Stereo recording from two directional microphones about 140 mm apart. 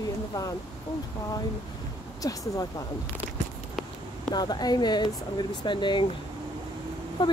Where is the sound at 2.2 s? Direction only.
25° left (ahead or behind).